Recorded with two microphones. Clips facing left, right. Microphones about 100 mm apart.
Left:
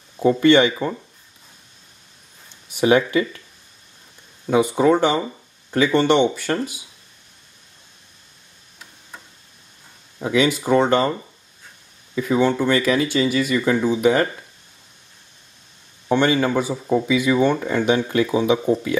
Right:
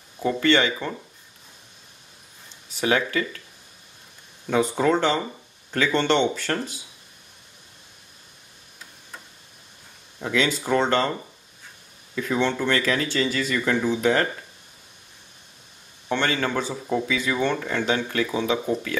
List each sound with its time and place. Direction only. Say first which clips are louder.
0.2 s speech: left 6 dB; 20° left (ahead or behind)
2.7 s speech: left 6 dB; 20° left (ahead or behind)
4.5 s speech: left 5 dB; 15° left (ahead or behind)
10.1 s speech: left 5 dB; 10° left (ahead or behind)
12.2 s speech: left 5 dB; 10° left (ahead or behind)
16.1 s speech: left 6 dB; 15° left (ahead or behind)